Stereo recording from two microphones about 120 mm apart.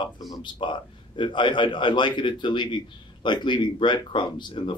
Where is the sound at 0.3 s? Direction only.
40° left (ahead or behind).